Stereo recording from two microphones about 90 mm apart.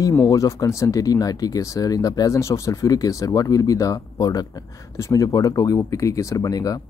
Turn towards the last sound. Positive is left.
turn(degrees=40)  # may be behind; listen again after turning